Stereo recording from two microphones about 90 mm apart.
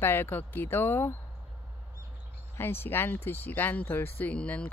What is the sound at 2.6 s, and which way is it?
Speech, 25° left (ahead or behind).